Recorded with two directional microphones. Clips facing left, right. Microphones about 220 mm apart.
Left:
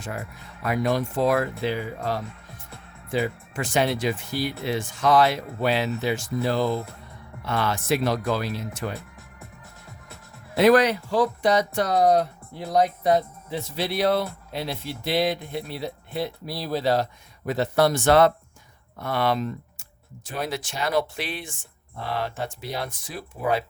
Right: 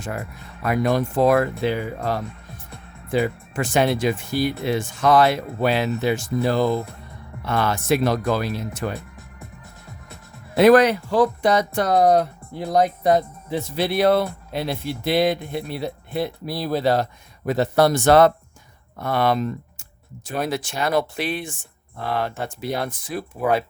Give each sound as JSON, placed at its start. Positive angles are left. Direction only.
{"t": 0.0, "sound": "speech", "side_deg": -50}
{"t": 10.5, "sound": "speech", "side_deg": -55}